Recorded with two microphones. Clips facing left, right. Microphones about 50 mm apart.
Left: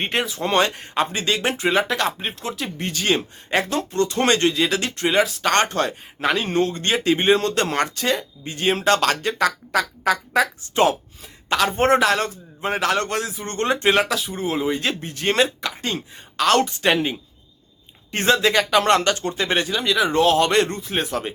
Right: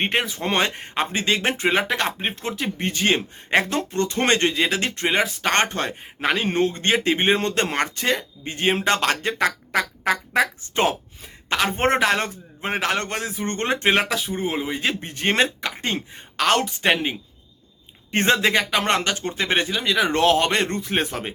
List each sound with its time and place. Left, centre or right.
0.0 s speech: right
14.6 s speech: centre
15.0 s speech: right
16.6 s speech: centre
18.2 s speech: right
18.5 s speech: centre
20.7 s speech: right
21.1 s speech: right